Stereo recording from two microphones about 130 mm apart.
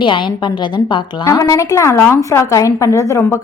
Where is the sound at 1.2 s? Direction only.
25° left (ahead or behind).